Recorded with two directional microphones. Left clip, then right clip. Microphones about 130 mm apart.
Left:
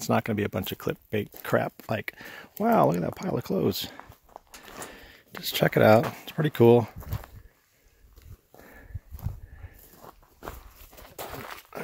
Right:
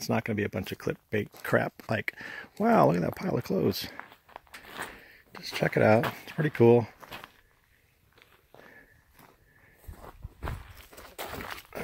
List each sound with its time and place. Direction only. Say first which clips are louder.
0.0 s speech: left 3 dB; 25° left (ahead or behind)
1.4 s speech: left 1 dB; 5° left (ahead or behind)
3.9 s walk: right 1 dB; 10° right (ahead or behind)
5.0 s a sound: left 6 dB; 40° left (ahead or behind)
5.7 s speech: left 4 dB; 25° left (ahead or behind)
11.1 s a sound: even; 10° left (ahead or behind)